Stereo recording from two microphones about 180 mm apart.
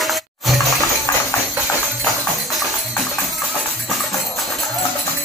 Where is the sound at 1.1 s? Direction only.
15° left (ahead or behind).